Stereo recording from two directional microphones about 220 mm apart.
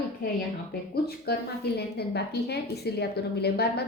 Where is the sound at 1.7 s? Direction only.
45° left (ahead or behind).